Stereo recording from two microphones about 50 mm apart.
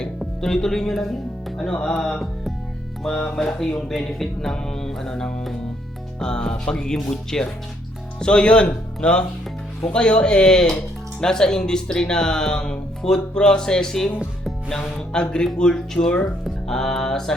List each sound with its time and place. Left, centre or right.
0.2 s speech: centre
1.5 s music: centre
1.8 s speech: centre